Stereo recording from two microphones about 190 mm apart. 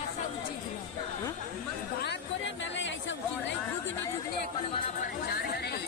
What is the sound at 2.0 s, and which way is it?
Chatter, 70° left (ahead or behind).